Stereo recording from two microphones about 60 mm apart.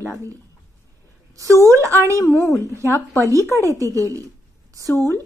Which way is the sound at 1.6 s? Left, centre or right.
Right.